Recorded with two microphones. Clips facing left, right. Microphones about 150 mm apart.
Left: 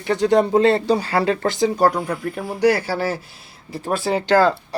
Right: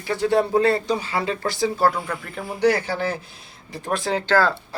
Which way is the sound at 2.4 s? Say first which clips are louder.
Left 2 dB; 5° left (ahead or behind).